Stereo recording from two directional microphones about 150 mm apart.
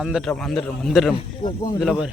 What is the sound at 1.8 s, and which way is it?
Speech, centre (ahead or behind).